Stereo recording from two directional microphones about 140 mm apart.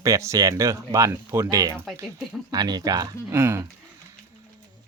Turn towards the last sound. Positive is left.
turn(degrees=-20)  # may be behind; listen again after turning